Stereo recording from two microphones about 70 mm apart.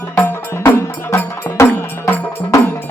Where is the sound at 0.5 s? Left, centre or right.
Left.